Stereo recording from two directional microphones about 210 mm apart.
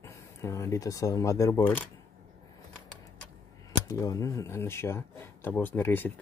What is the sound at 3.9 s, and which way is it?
Speech, 15° left (ahead or behind).